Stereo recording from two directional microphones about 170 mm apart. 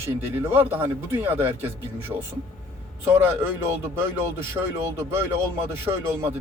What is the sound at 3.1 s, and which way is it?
Speech, 15° right (ahead or behind).